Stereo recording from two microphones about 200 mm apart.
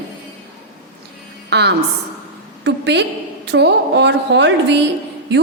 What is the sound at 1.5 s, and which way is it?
A woman's voice, 55° right (ahead or behind).